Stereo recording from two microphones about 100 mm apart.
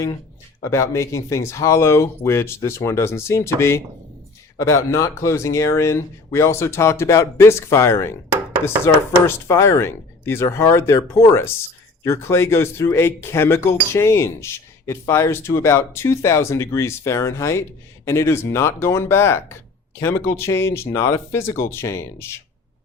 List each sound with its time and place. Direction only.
0.6 s speech: 30° left (ahead or behind)
9.2 s speech: 30° left (ahead or behind)